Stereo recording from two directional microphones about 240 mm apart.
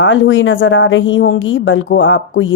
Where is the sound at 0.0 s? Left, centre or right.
Left.